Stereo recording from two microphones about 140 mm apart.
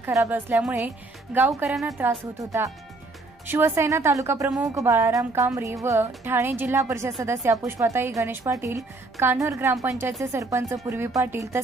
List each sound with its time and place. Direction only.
0.0 s a woman's voice: 15° right (ahead or behind)